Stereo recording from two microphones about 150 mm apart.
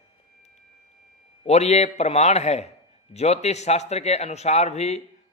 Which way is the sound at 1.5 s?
45° left (ahead or behind).